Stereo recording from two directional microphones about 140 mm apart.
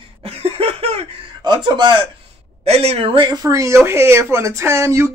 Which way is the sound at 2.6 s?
45° right (ahead or behind).